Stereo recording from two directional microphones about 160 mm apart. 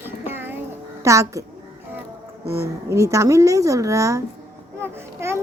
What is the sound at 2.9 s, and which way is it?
A child's voice, 20° right (ahead or behind).